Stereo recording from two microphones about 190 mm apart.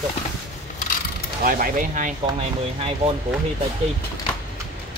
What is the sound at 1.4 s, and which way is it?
Speech, 45° right (ahead or behind).